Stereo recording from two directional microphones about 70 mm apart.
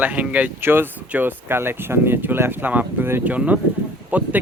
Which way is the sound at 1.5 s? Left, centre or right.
Right.